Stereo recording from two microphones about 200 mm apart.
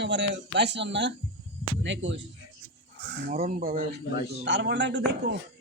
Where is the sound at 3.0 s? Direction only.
60° right (ahead or behind).